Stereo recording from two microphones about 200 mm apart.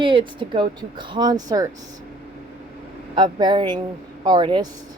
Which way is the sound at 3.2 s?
20° right (ahead or behind).